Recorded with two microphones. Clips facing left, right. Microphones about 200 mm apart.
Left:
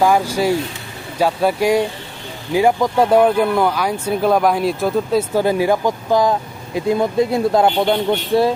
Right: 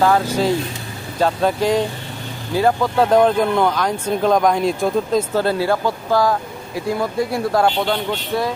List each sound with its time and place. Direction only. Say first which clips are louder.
0.0 s speech: left 1 dB; 10° left (ahead or behind); by 8.5 s 30° left (ahead or behind)